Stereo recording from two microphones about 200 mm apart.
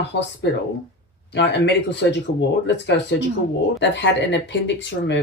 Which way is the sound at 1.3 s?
60° left (ahead or behind).